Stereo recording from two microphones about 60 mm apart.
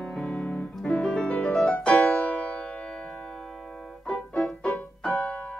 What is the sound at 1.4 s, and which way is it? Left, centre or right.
Music, centre.